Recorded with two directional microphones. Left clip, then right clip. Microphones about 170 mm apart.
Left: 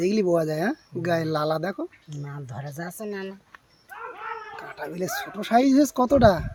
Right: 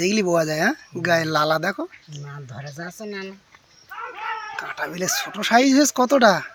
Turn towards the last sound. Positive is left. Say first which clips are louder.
# right 2 dB
turn(degrees=5)  # may be behind; listen again after turning